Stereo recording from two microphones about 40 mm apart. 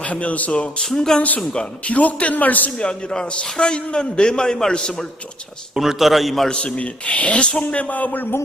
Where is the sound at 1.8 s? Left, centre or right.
Left.